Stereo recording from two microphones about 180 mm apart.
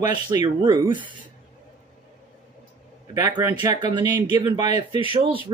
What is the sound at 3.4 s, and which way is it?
Speech, 25° right (ahead or behind).